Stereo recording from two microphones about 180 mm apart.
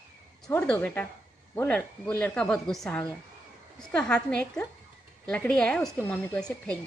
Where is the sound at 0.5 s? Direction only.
10° left (ahead or behind).